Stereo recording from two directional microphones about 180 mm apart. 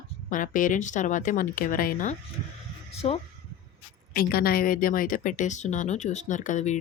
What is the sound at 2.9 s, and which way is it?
Speech, 35° left (ahead or behind).